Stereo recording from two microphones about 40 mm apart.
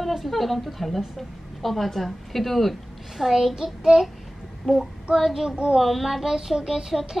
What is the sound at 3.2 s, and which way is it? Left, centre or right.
Child singing, centre.